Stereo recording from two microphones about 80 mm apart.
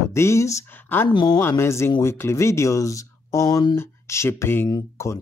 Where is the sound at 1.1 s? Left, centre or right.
Left.